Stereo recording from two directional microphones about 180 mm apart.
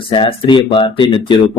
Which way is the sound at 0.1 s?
30° left (ahead or behind).